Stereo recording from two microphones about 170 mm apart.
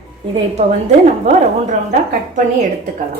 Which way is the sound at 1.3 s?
40° right (ahead or behind).